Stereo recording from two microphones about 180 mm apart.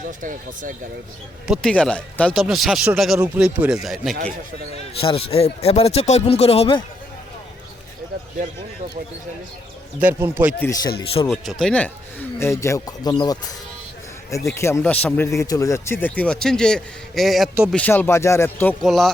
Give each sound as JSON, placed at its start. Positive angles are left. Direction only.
{"t": 0.2, "sound": "speech", "side_deg": -45}
{"t": 1.5, "sound": "speech", "side_deg": 5}
{"t": 4.9, "sound": "speech", "side_deg": 30}
{"t": 10.0, "sound": "speech", "side_deg": -10}
{"t": 10.6, "sound": "speech", "side_deg": 20}
{"t": 11.3, "sound": "speech", "side_deg": 0}